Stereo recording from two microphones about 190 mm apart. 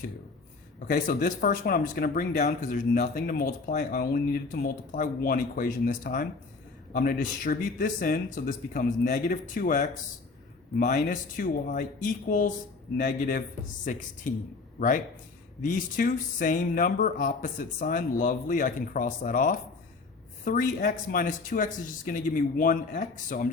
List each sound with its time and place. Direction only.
0.9 s speech: 50° left (ahead or behind)